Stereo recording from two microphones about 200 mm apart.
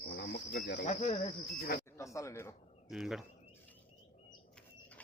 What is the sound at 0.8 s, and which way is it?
Cricket, 35° left (ahead or behind).